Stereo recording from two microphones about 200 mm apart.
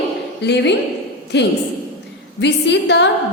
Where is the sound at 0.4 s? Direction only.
60° left (ahead or behind).